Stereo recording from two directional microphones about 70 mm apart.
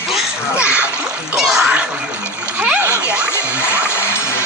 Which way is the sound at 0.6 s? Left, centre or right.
Centre.